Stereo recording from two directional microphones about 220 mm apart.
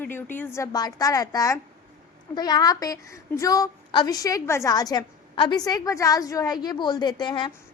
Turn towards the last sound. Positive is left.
turn(degrees=20)  # may be behind; listen again after turning